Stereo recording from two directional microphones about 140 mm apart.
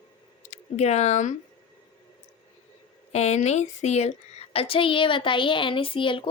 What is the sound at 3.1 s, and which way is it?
A woman's voice, 50° left (ahead or behind).